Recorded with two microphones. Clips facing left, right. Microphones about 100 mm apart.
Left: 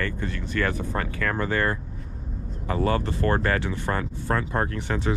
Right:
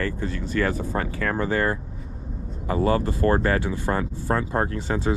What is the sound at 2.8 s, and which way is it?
Speech, 35° right (ahead or behind).